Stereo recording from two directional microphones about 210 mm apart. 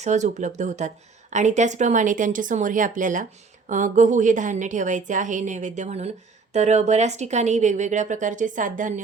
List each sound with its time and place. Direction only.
0.0 s a woman's voice: 35° right (ahead or behind)